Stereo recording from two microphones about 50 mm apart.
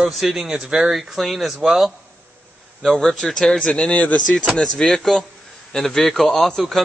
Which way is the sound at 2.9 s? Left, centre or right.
Centre.